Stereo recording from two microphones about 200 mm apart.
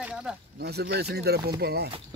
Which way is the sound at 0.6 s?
55° right (ahead or behind).